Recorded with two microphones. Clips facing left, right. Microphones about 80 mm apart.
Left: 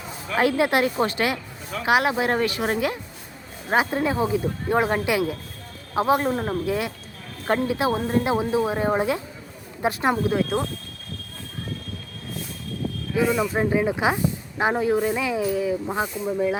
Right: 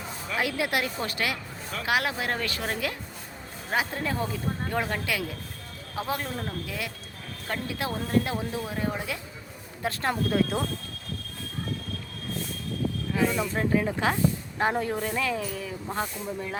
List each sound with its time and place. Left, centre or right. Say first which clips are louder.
0.3 s speech: left 8 dB; left
9.8 s speech: left 6 dB; centre
10.2 s speech: left 3 dB; centre
13.1 s speech: left 6 dB; centre